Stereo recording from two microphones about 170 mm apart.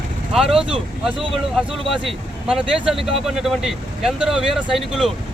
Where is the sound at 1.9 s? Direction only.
5° right (ahead or behind).